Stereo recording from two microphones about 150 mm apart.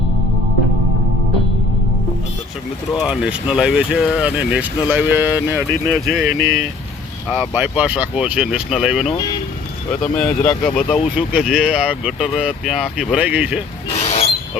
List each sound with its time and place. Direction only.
3.0 s speech: 5° right (ahead or behind)
5.9 s speech: centre (ahead or behind)
6.2 s speech: 80° left
7.3 s speech: 15° right (ahead or behind)
9.9 s speech: 5° left (ahead or behind)
14.0 s a sound: 45° left (ahead or behind)